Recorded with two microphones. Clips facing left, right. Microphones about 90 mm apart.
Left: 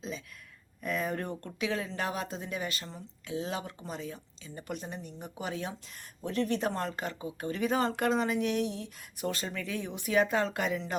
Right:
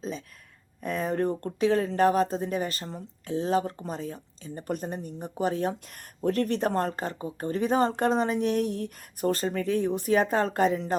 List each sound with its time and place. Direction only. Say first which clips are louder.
0.8 s speech: right 5 dB; 35° right (ahead or behind)
5.9 s speech: right 9 dB; 50° right (ahead or behind)